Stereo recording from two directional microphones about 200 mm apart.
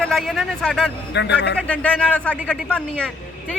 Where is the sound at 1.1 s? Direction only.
60° left (ahead or behind).